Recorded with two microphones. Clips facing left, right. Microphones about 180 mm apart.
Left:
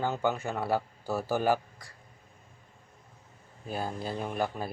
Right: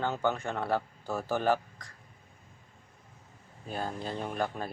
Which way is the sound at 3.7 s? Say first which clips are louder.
Left 1 dB; 10° left (ahead or behind).